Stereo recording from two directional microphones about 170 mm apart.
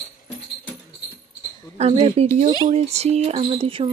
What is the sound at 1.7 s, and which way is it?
Speech, 35° right (ahead or behind).